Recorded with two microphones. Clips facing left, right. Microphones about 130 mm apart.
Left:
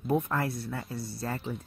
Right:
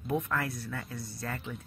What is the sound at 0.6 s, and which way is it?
Speech, 35° left (ahead or behind).